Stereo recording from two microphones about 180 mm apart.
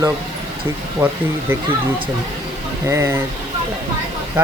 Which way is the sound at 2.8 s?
15° right (ahead or behind).